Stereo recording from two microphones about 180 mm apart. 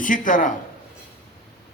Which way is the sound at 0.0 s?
45° left (ahead or behind).